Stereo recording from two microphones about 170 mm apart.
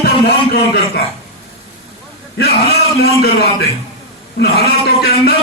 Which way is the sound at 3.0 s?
65° left (ahead or behind).